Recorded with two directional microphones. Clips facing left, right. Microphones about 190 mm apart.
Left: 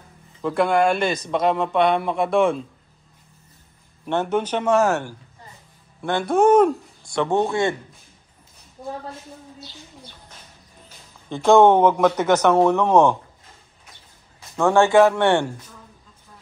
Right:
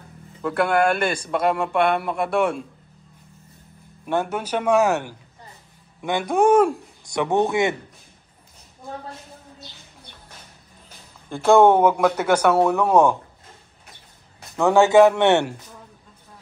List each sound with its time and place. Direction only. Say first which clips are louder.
0.4 s a man's voice: left 1 dB; 5° right (ahead or behind)
4.0 s a man's voice: left 2 dB; 10° right (ahead or behind)
11.2 s a man's voice: left 1 dB; 10° right (ahead or behind)
14.7 s a man's voice: right 1 dB; 15° right (ahead or behind)